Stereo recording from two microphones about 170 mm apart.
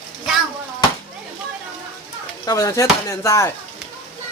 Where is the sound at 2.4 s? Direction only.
20° left (ahead or behind).